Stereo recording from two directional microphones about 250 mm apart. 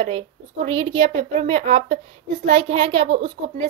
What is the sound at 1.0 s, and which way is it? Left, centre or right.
A woman's voice, right.